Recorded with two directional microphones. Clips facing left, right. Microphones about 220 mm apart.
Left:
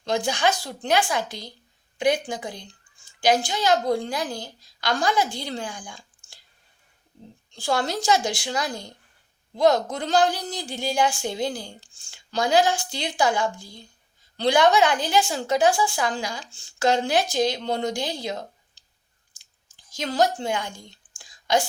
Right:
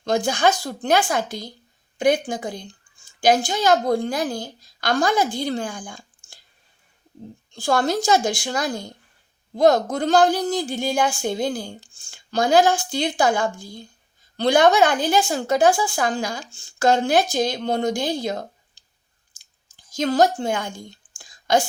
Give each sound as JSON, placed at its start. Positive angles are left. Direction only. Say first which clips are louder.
{"t": 0.0, "sound": "a woman's voice", "louder": "right 4 dB", "side_deg": -50}
{"t": 7.5, "sound": "a woman's voice", "louder": "right 4 dB", "side_deg": -50}
{"t": 19.4, "sound": "chewing", "louder": "right 3 dB", "side_deg": -50}
{"t": 21.2, "sound": "whispering", "louder": "right 3 dB", "side_deg": -50}